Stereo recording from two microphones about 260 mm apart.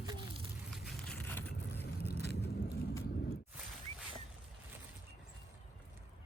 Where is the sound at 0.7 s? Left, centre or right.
Centre.